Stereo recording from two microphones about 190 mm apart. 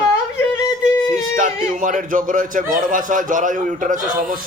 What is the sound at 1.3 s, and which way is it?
A man's voice, 45° right (ahead or behind).